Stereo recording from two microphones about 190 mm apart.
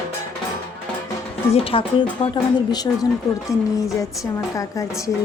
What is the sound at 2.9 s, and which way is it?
Speech, 10° left (ahead or behind).